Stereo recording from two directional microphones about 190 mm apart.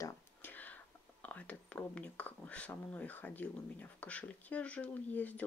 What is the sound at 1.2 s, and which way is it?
Speech, 5° left (ahead or behind).